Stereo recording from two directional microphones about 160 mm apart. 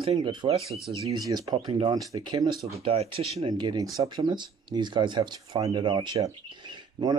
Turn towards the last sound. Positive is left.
turn(degrees=-30)  # may be behind; listen again after turning